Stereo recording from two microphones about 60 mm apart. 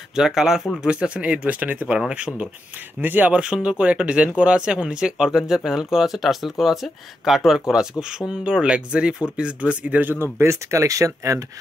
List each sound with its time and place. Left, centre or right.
0.1 s speech: centre
0.8 s speech: centre
1.9 s speech: centre
3.0 s speech: right
3.3 s speech: centre
10.3 s speech: right